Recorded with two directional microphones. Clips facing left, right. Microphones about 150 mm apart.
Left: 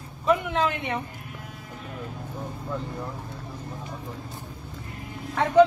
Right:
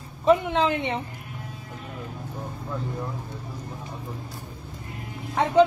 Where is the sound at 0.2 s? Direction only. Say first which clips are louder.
Right 3 dB; 30° right (ahead or behind).